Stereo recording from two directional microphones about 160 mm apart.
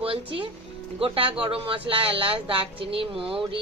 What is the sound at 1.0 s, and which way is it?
Speech, 35° right (ahead or behind).